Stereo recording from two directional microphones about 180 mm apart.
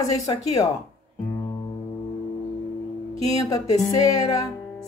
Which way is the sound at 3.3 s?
20° left (ahead or behind).